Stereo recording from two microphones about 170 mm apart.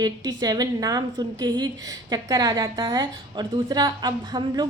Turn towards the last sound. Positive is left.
turn(degrees=-25)  # may be behind; listen again after turning